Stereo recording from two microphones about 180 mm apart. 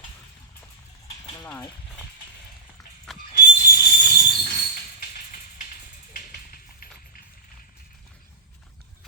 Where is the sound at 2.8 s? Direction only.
Centre (ahead or behind).